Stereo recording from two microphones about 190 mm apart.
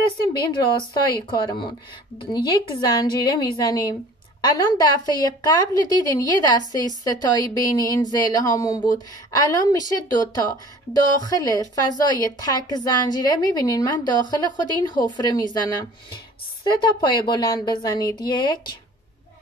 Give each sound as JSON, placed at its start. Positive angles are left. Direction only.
{"t": 0.0, "sound": "a woman's voice", "side_deg": 25}